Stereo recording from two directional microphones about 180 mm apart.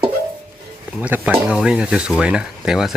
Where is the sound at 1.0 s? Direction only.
10° right (ahead or behind).